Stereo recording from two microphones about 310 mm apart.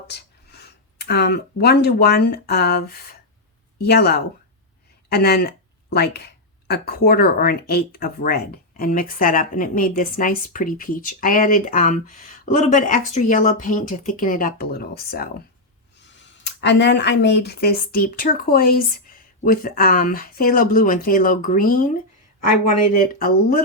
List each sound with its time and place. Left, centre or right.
0.1 s a woman's voice: left
23.0 s a woman's voice: left